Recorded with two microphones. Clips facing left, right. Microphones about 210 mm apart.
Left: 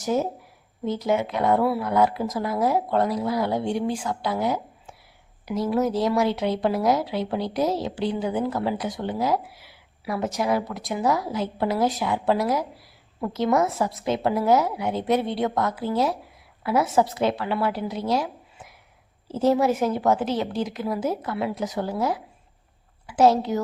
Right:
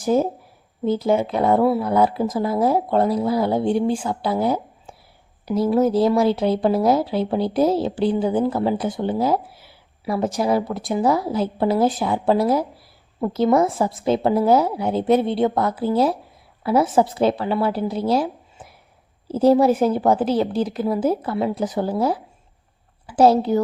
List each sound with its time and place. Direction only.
0.9 s a woman's voice: 30° right (ahead or behind)